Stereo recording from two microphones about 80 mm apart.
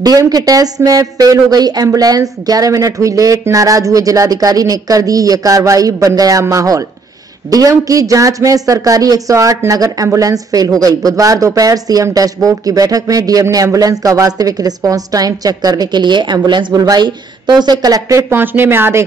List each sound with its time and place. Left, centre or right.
0.0 s speech: right
16.7 s speech: right
17.0 s a woman's voice: right
18.3 s speech: right